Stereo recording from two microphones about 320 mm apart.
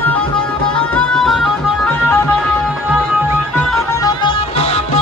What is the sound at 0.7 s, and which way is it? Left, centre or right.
Music, centre.